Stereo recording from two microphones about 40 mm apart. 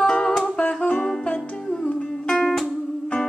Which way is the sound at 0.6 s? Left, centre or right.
Left.